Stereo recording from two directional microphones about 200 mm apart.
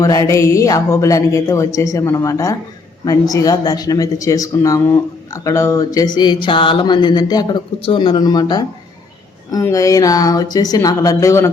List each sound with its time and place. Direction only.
0.0 s speech: 15° left (ahead or behind)